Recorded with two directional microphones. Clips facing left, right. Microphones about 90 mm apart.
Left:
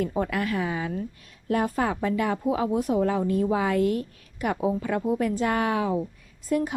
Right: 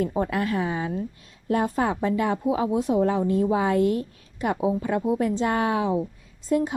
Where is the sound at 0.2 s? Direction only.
25° right (ahead or behind).